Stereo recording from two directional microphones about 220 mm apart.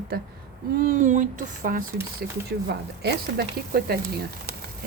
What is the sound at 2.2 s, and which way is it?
Speech, 50° right (ahead or behind).